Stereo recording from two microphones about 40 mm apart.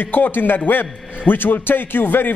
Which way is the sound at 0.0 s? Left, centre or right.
Left.